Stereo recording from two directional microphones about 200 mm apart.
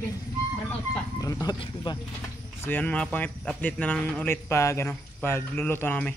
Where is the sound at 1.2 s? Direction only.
20° left (ahead or behind).